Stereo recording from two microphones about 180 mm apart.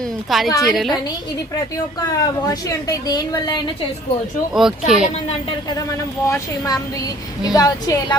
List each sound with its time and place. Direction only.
0.3 s speech: centre (ahead or behind)
2.0 s a woman's voice: 20° left (ahead or behind)
4.5 s speech: 5° right (ahead or behind)
6.2 s a woman's voice: 15° left (ahead or behind)